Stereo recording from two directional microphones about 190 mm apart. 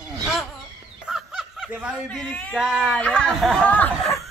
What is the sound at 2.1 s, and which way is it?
Speech, 5° left (ahead or behind).